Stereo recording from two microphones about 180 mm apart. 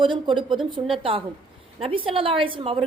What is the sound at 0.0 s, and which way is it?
A woman's voice, 25° right (ahead or behind).